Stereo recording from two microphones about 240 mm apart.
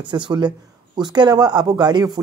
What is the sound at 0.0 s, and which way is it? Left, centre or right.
Speech, centre.